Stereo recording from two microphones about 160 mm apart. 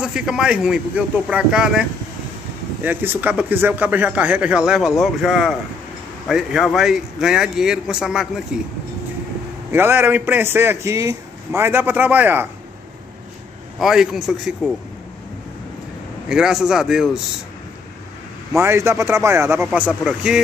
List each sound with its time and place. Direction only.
0.0 s a man's voice: 5° right (ahead or behind)
9.7 s speech: 15° right (ahead or behind)
13.7 s a man's voice: 5° right (ahead or behind)
16.3 s a man's voice: 5° right (ahead or behind)
18.5 s speech: 15° right (ahead or behind)